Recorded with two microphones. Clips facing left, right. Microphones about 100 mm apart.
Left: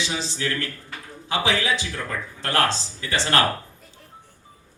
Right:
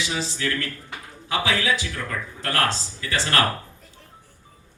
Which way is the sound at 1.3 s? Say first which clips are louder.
Even; 25° left (ahead or behind).